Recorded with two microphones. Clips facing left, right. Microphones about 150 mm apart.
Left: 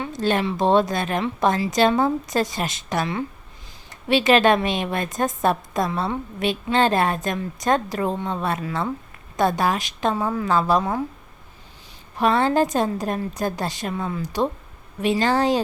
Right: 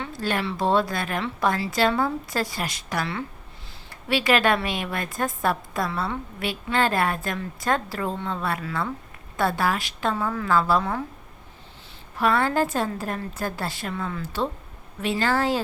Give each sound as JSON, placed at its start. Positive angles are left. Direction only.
{"t": 0.0, "sound": "a woman's voice", "side_deg": 20}
{"t": 12.1, "sound": "a woman's voice", "side_deg": 20}